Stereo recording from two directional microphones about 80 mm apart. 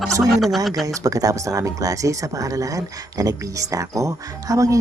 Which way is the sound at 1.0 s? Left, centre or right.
Right.